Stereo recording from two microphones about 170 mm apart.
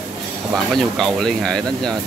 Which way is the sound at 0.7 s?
Centre (ahead or behind).